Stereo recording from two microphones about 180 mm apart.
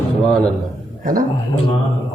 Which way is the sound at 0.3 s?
5° left (ahead or behind).